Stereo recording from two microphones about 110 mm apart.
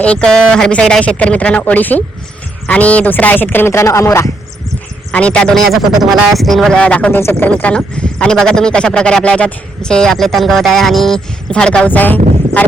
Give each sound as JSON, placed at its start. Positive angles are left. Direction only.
{"t": 0.0, "sound": "speech", "side_deg": 10}
{"t": 5.1, "sound": "speech", "side_deg": 10}
{"t": 7.6, "sound": "speech", "side_deg": 10}